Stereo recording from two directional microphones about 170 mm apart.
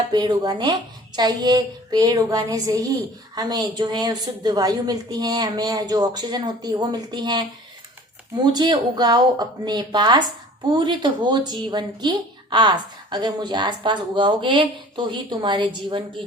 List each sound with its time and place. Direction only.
0.1 s a woman's voice: 25° right (ahead or behind)
8.5 s a woman's voice: 25° right (ahead or behind)